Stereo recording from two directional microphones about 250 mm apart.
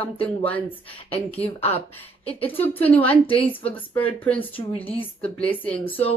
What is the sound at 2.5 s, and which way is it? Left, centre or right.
Speech, centre.